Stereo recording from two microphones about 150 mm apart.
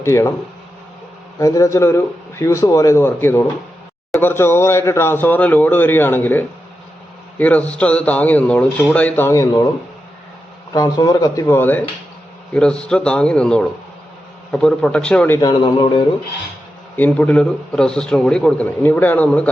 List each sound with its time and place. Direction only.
0.0 s a man's voice: 20° left (ahead or behind)
1.4 s a man's voice: 20° left (ahead or behind)
10.7 s a man's voice: 25° left (ahead or behind); by 15.4 s 10° left (ahead or behind)
15.4 s a man's voice: 30° left (ahead or behind)
17.0 s a man's voice: 10° left (ahead or behind)